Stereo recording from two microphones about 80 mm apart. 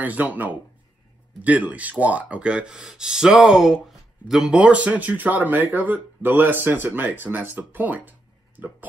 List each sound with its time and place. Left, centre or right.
0.0 s speech: right; by 3.7 s centre
3.8 s a sound: centre
4.6 s speech: centre